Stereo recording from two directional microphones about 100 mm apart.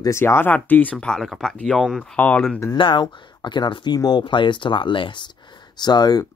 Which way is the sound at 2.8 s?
55° left (ahead or behind).